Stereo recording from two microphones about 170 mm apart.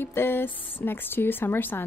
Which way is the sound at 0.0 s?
15° left (ahead or behind).